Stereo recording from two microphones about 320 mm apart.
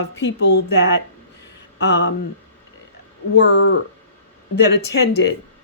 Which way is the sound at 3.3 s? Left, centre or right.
Left.